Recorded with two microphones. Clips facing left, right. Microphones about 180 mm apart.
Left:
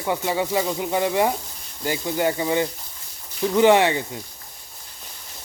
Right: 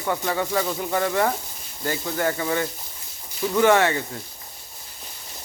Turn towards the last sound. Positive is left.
turn(degrees=15)  # may be behind; listen again after turning